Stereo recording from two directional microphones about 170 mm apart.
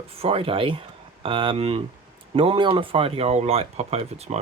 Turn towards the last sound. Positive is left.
turn(degrees=-40)  # may be behind; listen again after turning